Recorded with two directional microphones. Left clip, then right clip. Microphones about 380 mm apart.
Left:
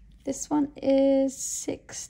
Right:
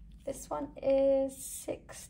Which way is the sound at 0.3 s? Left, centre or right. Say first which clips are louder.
Left 9 dB; centre.